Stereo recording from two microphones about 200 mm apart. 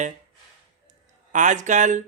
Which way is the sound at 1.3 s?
40° right (ahead or behind).